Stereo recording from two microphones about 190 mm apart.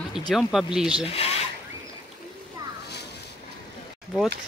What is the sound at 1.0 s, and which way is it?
Speech, 30° left (ahead or behind).